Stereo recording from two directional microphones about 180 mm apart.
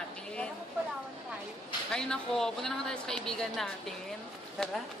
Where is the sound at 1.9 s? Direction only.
5° left (ahead or behind).